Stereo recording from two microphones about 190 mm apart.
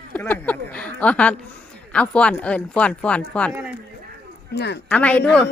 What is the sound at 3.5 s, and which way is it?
Speech, 10° right (ahead or behind).